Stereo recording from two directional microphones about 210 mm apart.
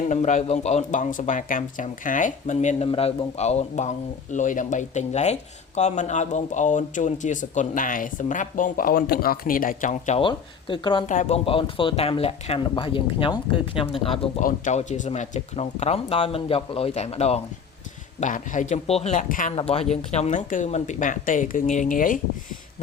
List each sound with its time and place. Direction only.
0.1 s speech: 35° left (ahead or behind)
11.1 s speech: 35° left (ahead or behind)